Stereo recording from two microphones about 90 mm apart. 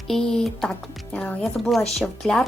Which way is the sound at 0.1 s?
5° left (ahead or behind).